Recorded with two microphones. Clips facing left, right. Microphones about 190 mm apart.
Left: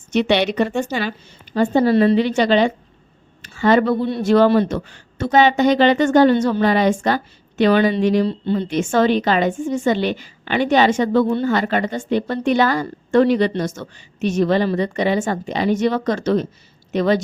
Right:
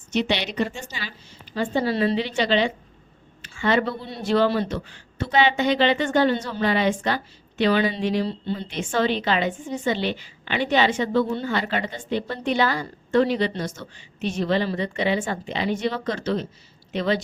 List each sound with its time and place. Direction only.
0.1 s a woman's voice: 60° left (ahead or behind)